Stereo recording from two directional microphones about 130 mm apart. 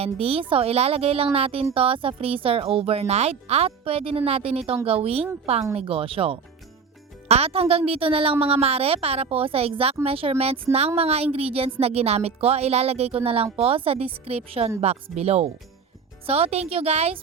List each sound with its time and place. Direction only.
0.0 s a woman's voice: 50° right (ahead or behind)